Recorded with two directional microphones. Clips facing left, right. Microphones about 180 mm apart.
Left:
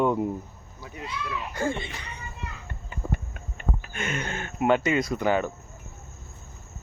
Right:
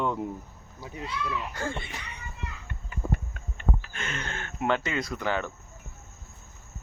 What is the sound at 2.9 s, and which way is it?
Clip-clop, 25° left (ahead or behind).